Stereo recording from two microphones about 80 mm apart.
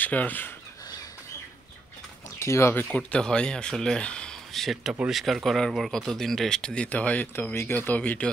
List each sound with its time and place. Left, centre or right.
0.0 s speech: centre
2.3 s speech: left
2.7 s speech: left
3.0 s speech: centre
7.3 s speech: left